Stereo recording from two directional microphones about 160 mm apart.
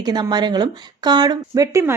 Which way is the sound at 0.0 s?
25° right (ahead or behind).